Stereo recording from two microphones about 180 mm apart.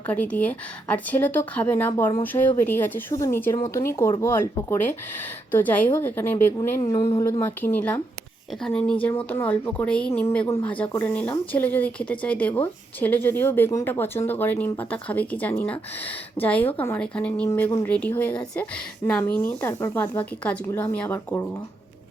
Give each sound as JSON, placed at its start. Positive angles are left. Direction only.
{"t": 0.1, "sound": "speech", "side_deg": 10}